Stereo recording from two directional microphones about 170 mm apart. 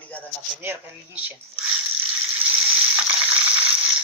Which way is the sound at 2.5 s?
10° right (ahead or behind).